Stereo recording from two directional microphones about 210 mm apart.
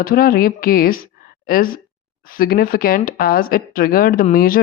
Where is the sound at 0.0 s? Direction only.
45° left (ahead or behind).